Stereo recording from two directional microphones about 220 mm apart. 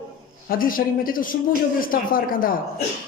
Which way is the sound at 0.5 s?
40° left (ahead or behind).